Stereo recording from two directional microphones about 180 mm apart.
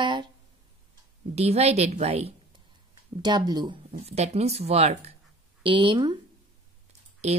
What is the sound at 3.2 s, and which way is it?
Speech, 20° right (ahead or behind).